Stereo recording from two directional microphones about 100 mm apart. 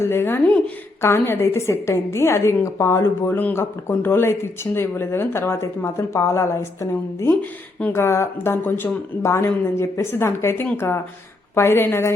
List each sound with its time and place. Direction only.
0.0 s a woman's voice: 25° left (ahead or behind)
7.8 s a woman's voice: 20° left (ahead or behind)